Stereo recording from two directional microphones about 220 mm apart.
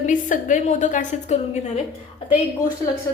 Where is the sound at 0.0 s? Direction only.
35° left (ahead or behind).